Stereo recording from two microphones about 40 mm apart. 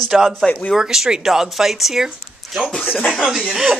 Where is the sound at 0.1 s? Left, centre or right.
Centre.